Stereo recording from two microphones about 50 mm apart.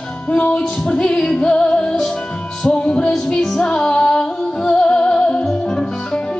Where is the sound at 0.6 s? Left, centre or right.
Centre.